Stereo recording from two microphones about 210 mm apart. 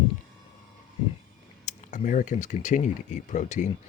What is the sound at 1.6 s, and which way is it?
Speech, 35° left (ahead or behind).